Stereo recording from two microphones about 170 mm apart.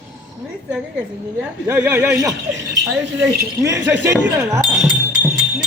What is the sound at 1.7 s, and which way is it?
Speech, 15° right (ahead or behind).